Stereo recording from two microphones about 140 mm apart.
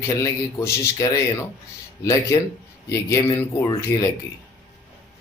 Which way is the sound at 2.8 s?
25° left (ahead or behind).